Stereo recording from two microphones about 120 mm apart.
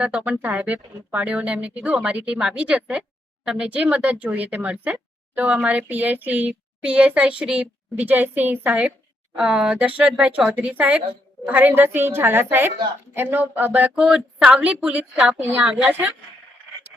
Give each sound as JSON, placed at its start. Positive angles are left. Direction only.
{"t": 0.0, "sound": "speech", "side_deg": -10}
{"t": 13.7, "sound": "a sound", "side_deg": -10}
{"t": 14.3, "sound": "speech", "side_deg": -10}